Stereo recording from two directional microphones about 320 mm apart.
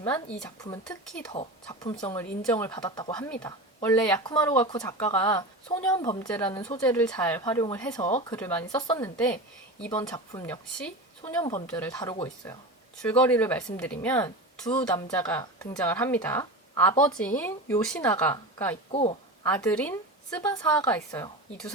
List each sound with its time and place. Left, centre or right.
0.0 s a woman's voice: centre
18.9 s a sound: centre
19.5 s a woman's voice: centre